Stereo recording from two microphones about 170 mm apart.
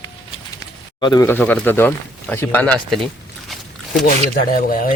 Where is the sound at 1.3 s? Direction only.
10° left (ahead or behind).